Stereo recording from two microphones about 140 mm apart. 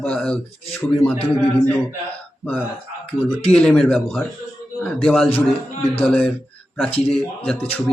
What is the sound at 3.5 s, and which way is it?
Speech, 5° left (ahead or behind).